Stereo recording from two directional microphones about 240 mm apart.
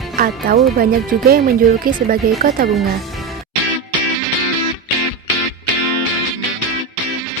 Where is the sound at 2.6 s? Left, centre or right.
Centre.